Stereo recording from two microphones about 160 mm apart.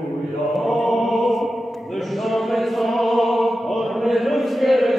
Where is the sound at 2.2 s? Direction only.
Centre (ahead or behind).